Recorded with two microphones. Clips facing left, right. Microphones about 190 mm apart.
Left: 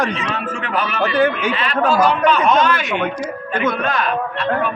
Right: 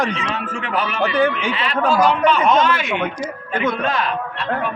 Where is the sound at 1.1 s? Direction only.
Centre (ahead or behind).